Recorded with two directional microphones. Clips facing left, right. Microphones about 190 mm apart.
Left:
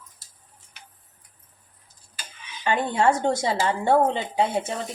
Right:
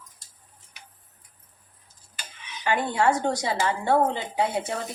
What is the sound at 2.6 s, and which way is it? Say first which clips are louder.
Speech: left 2 dB; 20° left (ahead or behind).